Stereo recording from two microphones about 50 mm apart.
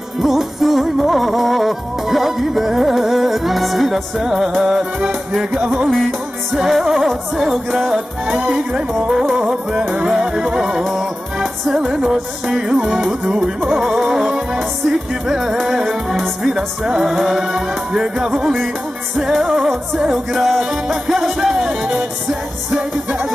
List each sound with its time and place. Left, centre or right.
0.2 s music: centre
6.8 s music: centre